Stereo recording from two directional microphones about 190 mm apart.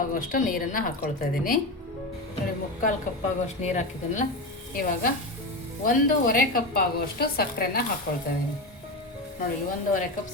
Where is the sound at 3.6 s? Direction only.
40° left (ahead or behind).